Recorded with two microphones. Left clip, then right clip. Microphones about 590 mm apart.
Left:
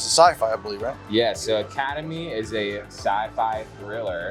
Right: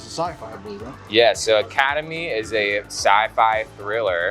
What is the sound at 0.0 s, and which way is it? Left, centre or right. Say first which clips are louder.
Music: left 11 dB; left.